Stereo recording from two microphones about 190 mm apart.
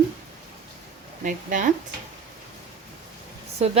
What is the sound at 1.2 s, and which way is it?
Speech, 45° right (ahead or behind).